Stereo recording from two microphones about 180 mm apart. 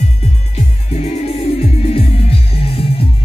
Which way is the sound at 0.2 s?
35° left (ahead or behind).